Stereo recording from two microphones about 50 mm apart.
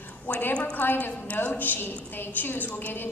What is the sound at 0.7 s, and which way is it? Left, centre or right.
A woman's voice, left.